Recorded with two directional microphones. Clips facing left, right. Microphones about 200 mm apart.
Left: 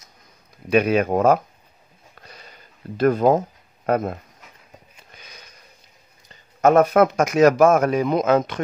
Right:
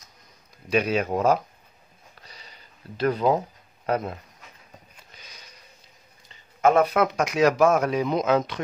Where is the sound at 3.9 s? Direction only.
50° left (ahead or behind).